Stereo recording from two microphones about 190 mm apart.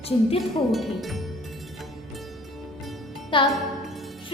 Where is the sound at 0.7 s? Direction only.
Centre (ahead or behind).